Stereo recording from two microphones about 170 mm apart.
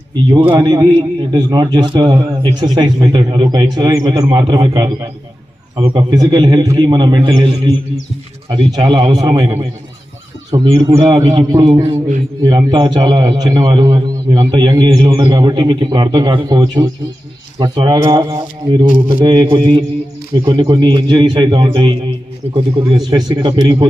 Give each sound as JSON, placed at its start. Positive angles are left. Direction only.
{"t": 0.3, "sound": "a man's voice", "side_deg": -25}